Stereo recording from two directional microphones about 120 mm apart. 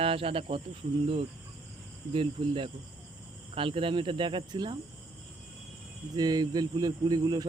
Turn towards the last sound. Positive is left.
turn(degrees=-35)  # may be behind; listen again after turning